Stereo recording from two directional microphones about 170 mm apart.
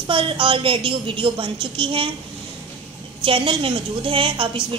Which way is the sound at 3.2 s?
30° right (ahead or behind).